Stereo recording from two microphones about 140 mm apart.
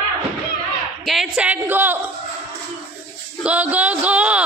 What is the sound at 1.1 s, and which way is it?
A woman's voice, 5° right (ahead or behind).